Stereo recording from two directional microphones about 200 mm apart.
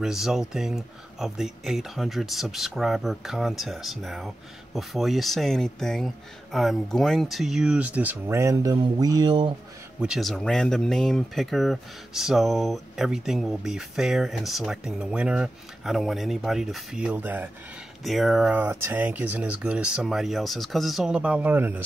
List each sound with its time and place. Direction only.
0.0 s speech: centre (ahead or behind); by 9.6 s 20° right (ahead or behind)
10.0 s speech: centre (ahead or behind)